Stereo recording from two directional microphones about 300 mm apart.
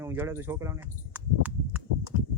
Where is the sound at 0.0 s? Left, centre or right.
Centre.